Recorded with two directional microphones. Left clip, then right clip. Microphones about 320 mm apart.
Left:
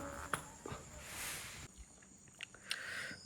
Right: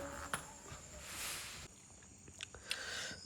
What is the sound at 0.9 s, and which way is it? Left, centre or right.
Boat, centre.